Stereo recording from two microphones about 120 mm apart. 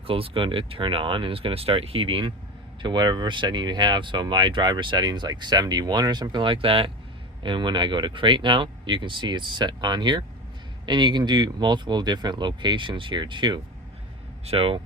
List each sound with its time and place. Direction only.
0.1 s speech: 45° right (ahead or behind)
14.4 s speech: 55° right (ahead or behind)